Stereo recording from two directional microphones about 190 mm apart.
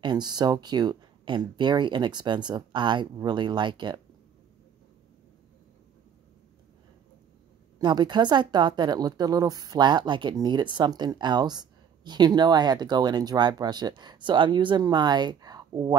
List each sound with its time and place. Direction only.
0.0 s a woman's voice: 20° right (ahead or behind)
7.8 s a woman's voice: 25° right (ahead or behind)